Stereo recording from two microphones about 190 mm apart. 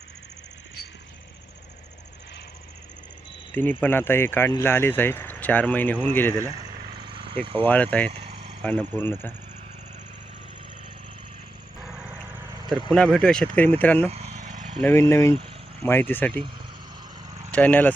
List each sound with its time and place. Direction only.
3.5 s speech: 10° left (ahead or behind)
7.0 s a sound: 25° right (ahead or behind)
7.6 s speech: 10° left (ahead or behind)
8.1 s vehicle: 30° right (ahead or behind)
8.6 s speech: 10° left (ahead or behind)
11.8 s lawn mower: 5° right (ahead or behind)
12.9 s speech: centre (ahead or behind)
14.1 s vehicle: 35° right (ahead or behind)
14.8 s speech: 10° left (ahead or behind)
17.5 s speech: 10° left (ahead or behind)